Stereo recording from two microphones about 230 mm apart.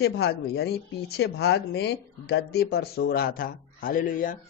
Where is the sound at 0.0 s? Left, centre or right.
Left.